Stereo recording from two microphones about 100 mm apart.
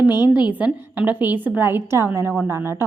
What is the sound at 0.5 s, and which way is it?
A woman's voice, 15° right (ahead or behind).